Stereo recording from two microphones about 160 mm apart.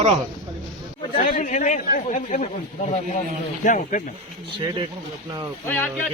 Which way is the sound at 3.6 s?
50° left (ahead or behind).